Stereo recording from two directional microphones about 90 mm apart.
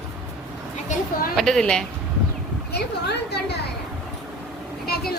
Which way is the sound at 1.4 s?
5° left (ahead or behind).